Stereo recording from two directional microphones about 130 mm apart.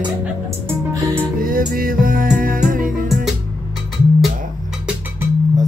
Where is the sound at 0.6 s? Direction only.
15° right (ahead or behind).